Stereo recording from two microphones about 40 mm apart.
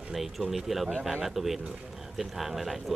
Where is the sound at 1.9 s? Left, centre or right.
Centre.